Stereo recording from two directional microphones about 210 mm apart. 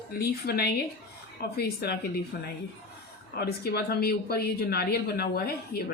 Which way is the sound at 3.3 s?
50° left (ahead or behind).